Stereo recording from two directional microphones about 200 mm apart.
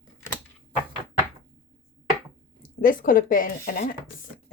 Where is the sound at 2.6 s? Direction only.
45° left (ahead or behind).